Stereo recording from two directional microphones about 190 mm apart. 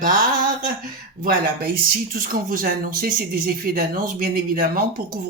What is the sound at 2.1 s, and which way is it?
Speech, 50° right (ahead or behind).